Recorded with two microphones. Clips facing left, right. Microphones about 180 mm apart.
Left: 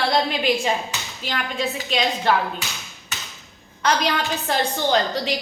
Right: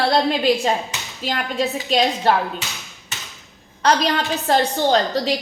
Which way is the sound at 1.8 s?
35° right (ahead or behind).